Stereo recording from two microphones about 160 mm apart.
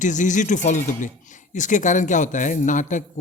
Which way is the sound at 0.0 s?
50° left (ahead or behind).